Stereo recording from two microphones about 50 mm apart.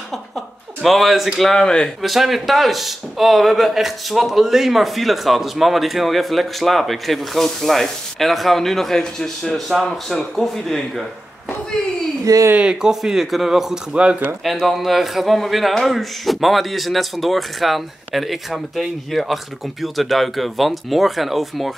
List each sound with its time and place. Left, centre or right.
0.8 s speech: centre
1.5 s speech: centre
2.0 s speech: centre
12.5 s speech: centre
13.9 s speech: right
14.4 s speech: centre